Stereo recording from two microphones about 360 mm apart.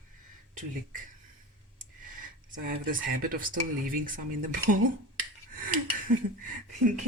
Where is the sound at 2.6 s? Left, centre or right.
Right.